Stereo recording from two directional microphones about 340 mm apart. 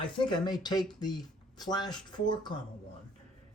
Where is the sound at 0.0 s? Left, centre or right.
Centre.